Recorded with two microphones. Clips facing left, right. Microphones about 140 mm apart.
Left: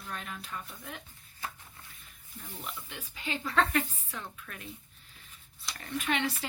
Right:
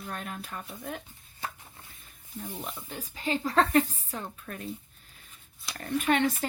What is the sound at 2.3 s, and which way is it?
Speech, 40° right (ahead or behind).